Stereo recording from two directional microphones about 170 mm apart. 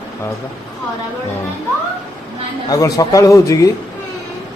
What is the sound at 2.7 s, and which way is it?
Speech, 20° left (ahead or behind).